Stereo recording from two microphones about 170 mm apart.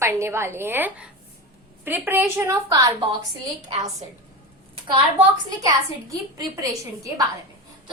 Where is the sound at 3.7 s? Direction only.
40° right (ahead or behind).